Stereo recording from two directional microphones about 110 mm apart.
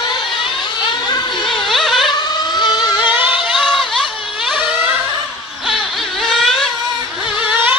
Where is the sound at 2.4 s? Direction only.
35° left (ahead or behind).